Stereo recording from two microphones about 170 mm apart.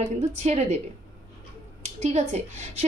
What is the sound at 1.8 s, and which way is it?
A woman's voice, 40° right (ahead or behind).